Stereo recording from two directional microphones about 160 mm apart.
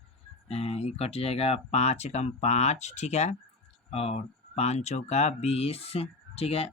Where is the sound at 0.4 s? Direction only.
40° left (ahead or behind).